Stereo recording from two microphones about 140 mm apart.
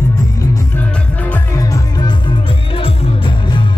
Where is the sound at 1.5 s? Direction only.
25° left (ahead or behind).